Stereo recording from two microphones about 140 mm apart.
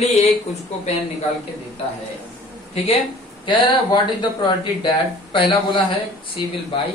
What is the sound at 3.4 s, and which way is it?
Speech, 35° left (ahead or behind).